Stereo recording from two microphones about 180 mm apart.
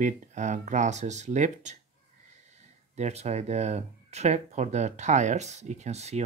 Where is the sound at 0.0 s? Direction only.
40° right (ahead or behind).